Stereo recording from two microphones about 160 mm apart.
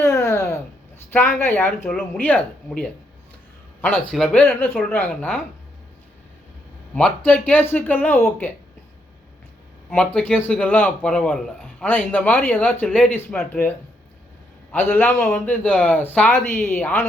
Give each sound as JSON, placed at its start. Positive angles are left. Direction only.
{"t": 0.0, "sound": "a sound", "side_deg": 15}
{"t": 1.4, "sound": "speech", "side_deg": 15}
{"t": 6.9, "sound": "speech", "side_deg": 5}
{"t": 9.9, "sound": "speech", "side_deg": 5}